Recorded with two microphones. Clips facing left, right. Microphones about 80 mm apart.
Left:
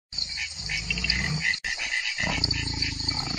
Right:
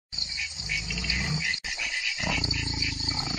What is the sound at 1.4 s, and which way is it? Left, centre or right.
Dog, left.